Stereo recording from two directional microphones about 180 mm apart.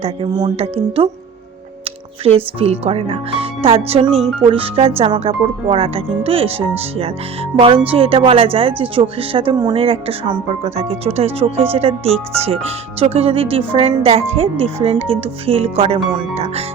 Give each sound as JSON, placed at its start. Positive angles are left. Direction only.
{"t": 0.0, "sound": "speech", "side_deg": -25}
{"t": 2.2, "sound": "speech", "side_deg": -30}